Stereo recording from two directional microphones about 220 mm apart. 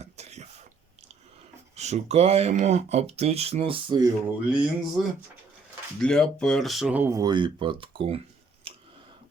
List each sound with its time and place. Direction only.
0.0 s throat clearing: 30° right (ahead or behind)
1.7 s speech: 30° right (ahead or behind)
4.4 s speech: 5° right (ahead or behind)
6.0 s speech: 5° left (ahead or behind); by 8.2 s 25° right (ahead or behind)
8.7 s scissors: 25° right (ahead or behind)